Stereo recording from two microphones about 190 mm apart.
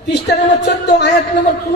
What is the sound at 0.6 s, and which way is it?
Speech, 65° left (ahead or behind).